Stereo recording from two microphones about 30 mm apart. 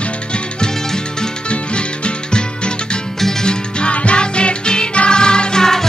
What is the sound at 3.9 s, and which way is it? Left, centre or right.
Music, left.